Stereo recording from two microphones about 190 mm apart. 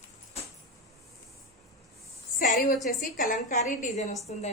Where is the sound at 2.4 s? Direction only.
50° left (ahead or behind).